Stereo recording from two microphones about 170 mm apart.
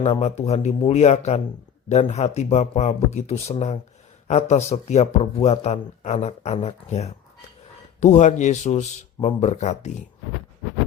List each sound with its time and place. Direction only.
0.0 s speech: 40° left (ahead or behind)